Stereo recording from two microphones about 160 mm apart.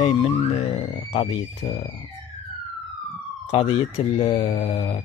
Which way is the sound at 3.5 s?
35° left (ahead or behind).